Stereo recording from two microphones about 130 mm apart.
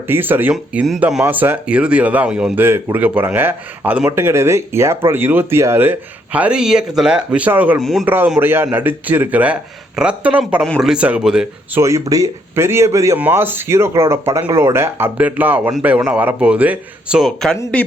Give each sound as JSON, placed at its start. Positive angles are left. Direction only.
{"t": 0.1, "sound": "speech", "side_deg": -15}
{"t": 7.8, "sound": "speech", "side_deg": 0}
{"t": 8.0, "sound": "speech", "side_deg": -15}
{"t": 11.8, "sound": "speech", "side_deg": -25}